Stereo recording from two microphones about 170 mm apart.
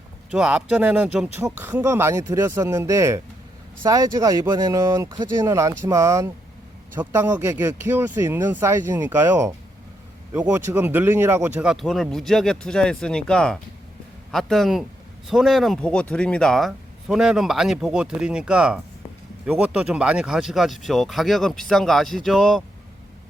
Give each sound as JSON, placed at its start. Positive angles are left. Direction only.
{"t": 0.3, "sound": "speech", "side_deg": -5}